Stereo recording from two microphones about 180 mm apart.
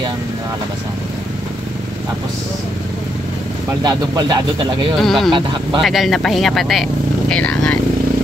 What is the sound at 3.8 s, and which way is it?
Speech, 20° right (ahead or behind).